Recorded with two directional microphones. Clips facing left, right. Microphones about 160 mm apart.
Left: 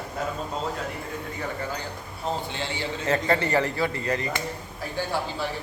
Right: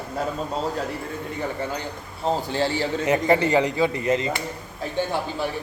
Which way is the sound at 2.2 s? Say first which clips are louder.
Right 7 dB; 40° right (ahead or behind).